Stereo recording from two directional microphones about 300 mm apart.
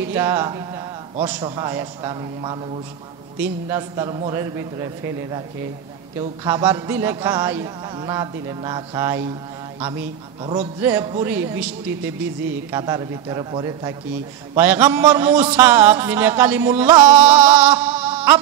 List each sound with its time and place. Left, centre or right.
0.0 s a man's voice: centre
6.4 s a man's voice: centre